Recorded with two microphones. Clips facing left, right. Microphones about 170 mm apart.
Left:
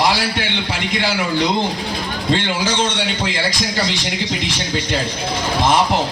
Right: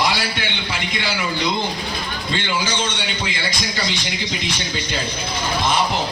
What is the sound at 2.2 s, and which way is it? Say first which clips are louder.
Speech: left 5 dB; 90° left.